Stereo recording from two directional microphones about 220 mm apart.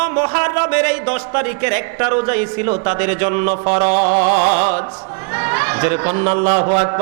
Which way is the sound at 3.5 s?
30° right (ahead or behind).